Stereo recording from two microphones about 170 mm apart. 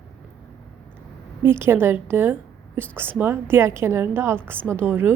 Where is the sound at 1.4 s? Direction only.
15° right (ahead or behind).